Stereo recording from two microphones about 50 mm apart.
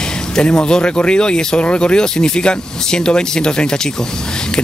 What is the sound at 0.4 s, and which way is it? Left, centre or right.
Speech, centre.